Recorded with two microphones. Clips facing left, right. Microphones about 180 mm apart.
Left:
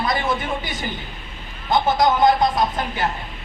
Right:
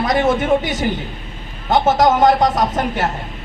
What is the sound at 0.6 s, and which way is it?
Speech, 80° right.